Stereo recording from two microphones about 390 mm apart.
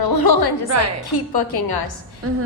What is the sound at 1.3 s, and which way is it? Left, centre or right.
Speech, left.